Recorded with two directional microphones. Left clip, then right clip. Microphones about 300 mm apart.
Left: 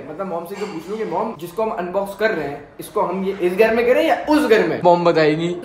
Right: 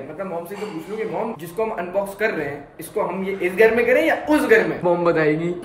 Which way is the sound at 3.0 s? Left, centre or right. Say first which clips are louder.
Left 3 dB; centre.